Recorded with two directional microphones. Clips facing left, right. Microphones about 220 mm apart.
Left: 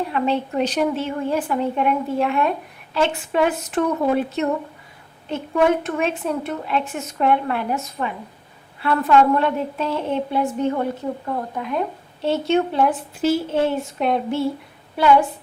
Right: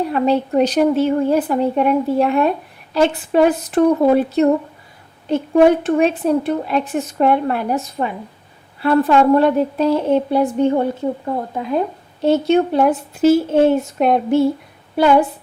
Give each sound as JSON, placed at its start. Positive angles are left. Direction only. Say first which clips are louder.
{"t": 0.1, "sound": "speech", "louder": "right 5 dB", "side_deg": -40}
{"t": 12.2, "sound": "speech", "louder": "right 5 dB", "side_deg": -40}